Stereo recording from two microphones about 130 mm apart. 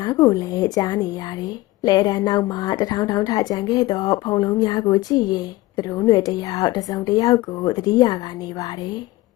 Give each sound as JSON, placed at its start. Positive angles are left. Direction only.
{"t": 0.0, "sound": "a woman's voice", "side_deg": 30}